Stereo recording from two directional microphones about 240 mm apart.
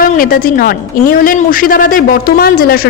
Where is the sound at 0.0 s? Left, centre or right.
Left.